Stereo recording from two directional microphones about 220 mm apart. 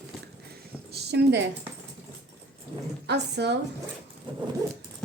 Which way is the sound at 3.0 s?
50° right (ahead or behind).